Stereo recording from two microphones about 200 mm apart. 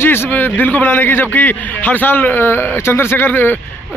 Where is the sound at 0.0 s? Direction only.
10° left (ahead or behind).